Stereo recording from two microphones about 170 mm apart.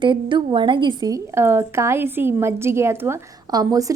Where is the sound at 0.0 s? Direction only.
30° right (ahead or behind).